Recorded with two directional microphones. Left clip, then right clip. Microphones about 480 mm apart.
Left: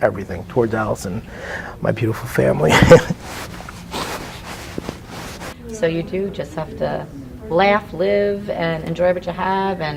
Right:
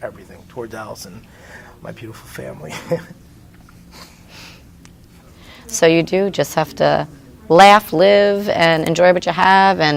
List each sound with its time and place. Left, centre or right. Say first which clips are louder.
0.5 s speech: left 10 dB; left
5.8 s speech: right 7 dB; right